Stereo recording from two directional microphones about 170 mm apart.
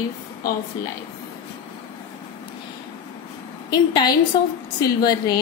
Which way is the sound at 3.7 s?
25° left (ahead or behind).